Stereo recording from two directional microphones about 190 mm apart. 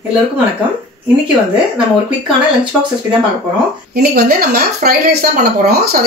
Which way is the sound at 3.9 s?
55° right (ahead or behind).